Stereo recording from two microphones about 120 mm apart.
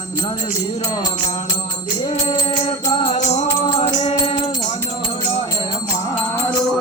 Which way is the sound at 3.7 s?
40° left (ahead or behind).